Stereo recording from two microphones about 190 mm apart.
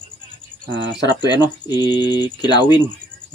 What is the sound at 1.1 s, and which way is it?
Speech, 20° left (ahead or behind).